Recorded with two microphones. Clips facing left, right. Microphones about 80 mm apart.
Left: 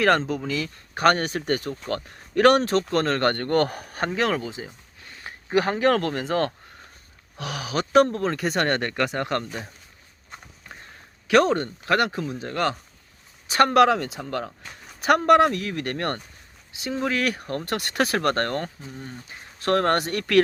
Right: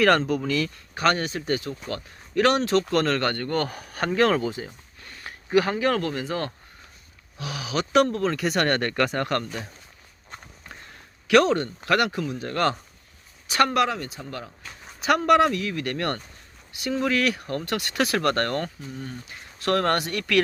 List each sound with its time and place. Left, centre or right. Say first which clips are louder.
0.3 s speech: right 3 dB; centre
0.9 s speech: left 3 dB; left
2.9 s speech: left 1 dB; left
4.1 s speech: right 5 dB; centre
4.6 s a sound: right 1 dB; centre
5.1 s a sound: right 1 dB; left
5.5 s speech: left 1 dB; left
5.9 s speech: left 3 dB; left
8.9 s speech: right 1 dB; centre
11.3 s speech: even; left; by 12.7 s centre
13.5 s speech: left 2 dB; left
13.7 s speech: left 6 dB; left
15.0 s speech: left 2 dB; left
16.7 s speech: right 2 dB; left